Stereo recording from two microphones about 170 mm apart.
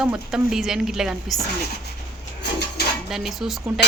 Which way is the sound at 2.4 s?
80° left.